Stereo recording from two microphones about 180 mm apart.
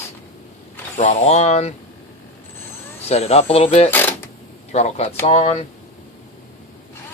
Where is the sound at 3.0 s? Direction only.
35° left (ahead or behind).